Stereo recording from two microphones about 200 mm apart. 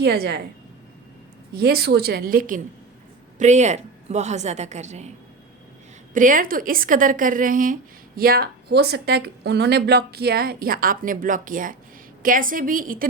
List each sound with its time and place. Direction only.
0.0 s a woman's voice: 55° right (ahead or behind)
1.5 s a woman's voice: 55° right (ahead or behind); by 5.1 s 35° right (ahead or behind)
6.1 s a woman's voice: 40° right (ahead or behind)